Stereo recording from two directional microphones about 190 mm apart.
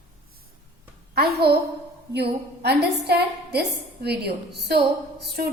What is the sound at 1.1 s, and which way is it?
A woman's voice, 55° right (ahead or behind).